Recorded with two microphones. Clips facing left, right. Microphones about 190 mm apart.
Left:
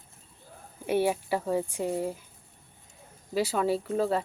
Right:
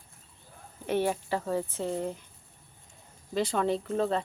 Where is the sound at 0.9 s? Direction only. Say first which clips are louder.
Left 2 dB; 10° left (ahead or behind).